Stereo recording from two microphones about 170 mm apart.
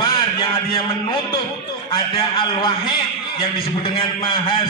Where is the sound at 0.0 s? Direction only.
30° left (ahead or behind).